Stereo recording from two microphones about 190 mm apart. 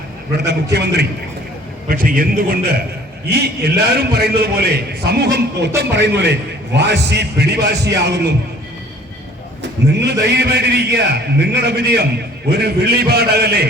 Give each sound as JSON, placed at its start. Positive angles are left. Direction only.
{"t": 0.3, "sound": "a man's voice", "side_deg": -60}
{"t": 1.9, "sound": "a man's voice", "side_deg": -50}
{"t": 9.9, "sound": "a man's voice", "side_deg": -60}